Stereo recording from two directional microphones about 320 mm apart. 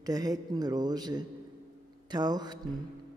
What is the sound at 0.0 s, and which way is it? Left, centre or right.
Speech, centre.